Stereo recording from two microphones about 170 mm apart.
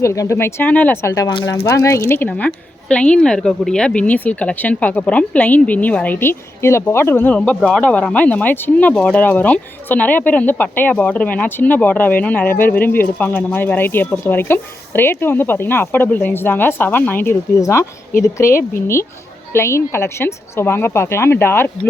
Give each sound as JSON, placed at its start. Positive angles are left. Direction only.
{"t": 0.0, "sound": "speech", "side_deg": 15}